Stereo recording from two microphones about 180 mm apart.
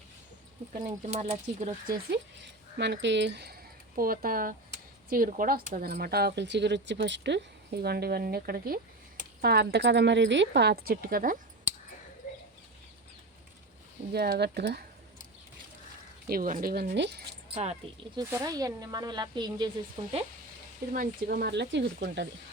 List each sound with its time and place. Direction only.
1.0 s speech: 35° right (ahead or behind)
2.4 s speech: 70° right (ahead or behind); by 11.3 s 55° right (ahead or behind)
12.2 s bird: 50° left (ahead or behind)
14.1 s speech: 65° right (ahead or behind)
16.3 s speech: 50° right (ahead or behind); by 17.2 s 75° right (ahead or behind)
17.5 s speech: 35° right (ahead or behind)
18.2 s speech: 15° right (ahead or behind)
20.9 s speech: 50° right (ahead or behind); by 22.3 s 70° right (ahead or behind)